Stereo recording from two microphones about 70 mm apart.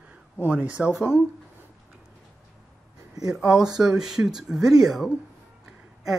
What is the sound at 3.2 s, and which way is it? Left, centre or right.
Speech, centre.